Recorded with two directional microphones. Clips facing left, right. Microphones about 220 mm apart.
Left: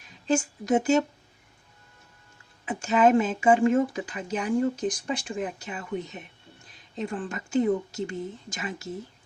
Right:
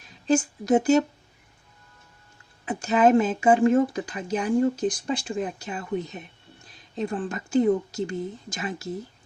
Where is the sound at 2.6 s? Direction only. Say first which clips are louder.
Right 1 dB; 35° right (ahead or behind).